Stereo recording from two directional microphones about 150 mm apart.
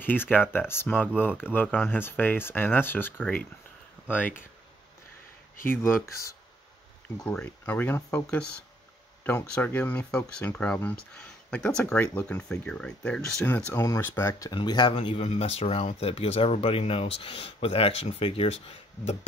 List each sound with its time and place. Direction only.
0.0 s speech: 15° left (ahead or behind)
5.7 s speech: 15° left (ahead or behind)
13.7 s speech: 20° left (ahead or behind)
14.5 s speech: 30° left (ahead or behind)